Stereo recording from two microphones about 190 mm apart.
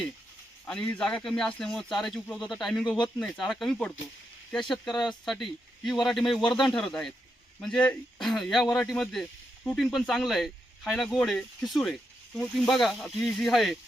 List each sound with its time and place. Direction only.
0.6 s speech: 5° left (ahead or behind)
4.9 s speech: 25° left (ahead or behind)
5.2 s speech: centre (ahead or behind)